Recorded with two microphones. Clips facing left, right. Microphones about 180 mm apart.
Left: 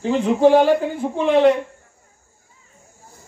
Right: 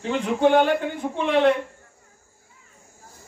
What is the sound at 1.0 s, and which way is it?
Speech, 30° left (ahead or behind).